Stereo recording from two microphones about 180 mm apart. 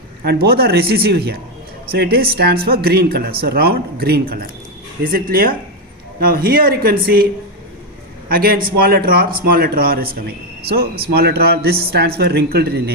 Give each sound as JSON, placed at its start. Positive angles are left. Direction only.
{"t": 0.3, "sound": "speech", "side_deg": -60}
{"t": 8.3, "sound": "speech", "side_deg": -55}